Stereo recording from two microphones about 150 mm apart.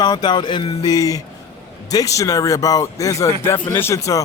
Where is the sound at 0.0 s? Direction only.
30° left (ahead or behind).